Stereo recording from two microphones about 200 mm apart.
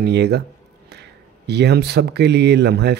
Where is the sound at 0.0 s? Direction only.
55° right (ahead or behind).